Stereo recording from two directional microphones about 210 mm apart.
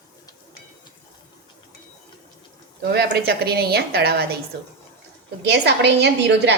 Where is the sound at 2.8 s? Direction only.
50° right (ahead or behind).